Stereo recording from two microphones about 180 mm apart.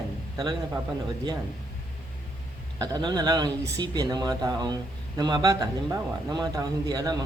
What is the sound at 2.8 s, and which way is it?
Speech, 20° right (ahead or behind).